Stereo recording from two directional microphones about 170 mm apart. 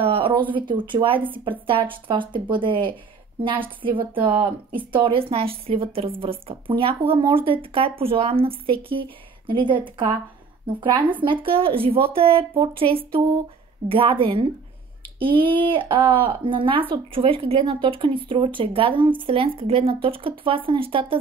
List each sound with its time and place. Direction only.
0.0 s speech: 30° right (ahead or behind)